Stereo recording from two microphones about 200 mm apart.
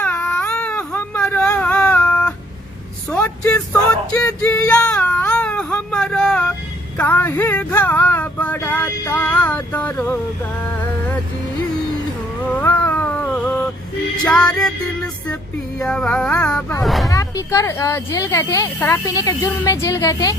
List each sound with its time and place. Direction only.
0.0 s baby cry: 5° left (ahead or behind)
3.1 s a sound: 10° left (ahead or behind)
4.3 s speech: 10° left (ahead or behind)
6.9 s male singing: 10° left (ahead or behind)
12.5 s cat: 10° left (ahead or behind)
14.6 s music: 5° left (ahead or behind)
16.8 s speech: centre (ahead or behind)
17.1 s male singing: 15° left (ahead or behind)